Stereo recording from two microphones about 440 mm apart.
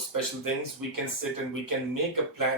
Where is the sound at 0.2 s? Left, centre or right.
Right.